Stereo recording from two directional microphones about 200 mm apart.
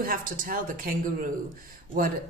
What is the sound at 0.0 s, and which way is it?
A woman's voice, 45° right (ahead or behind).